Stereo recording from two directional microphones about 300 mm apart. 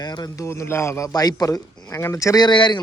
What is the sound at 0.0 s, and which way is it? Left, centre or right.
Speech, centre.